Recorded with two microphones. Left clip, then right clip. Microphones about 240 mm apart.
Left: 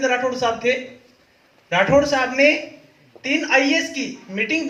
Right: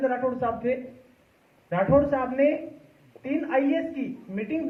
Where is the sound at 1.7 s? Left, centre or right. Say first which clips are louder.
Left 6 dB; left.